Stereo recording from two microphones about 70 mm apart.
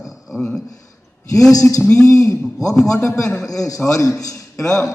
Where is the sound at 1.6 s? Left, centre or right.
Left.